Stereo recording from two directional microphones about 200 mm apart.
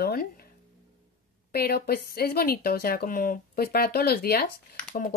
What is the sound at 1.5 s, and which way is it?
A woman's voice, 50° left (ahead or behind).